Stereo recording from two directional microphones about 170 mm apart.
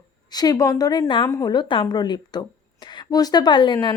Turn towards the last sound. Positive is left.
turn(degrees=25)  # may be behind; listen again after turning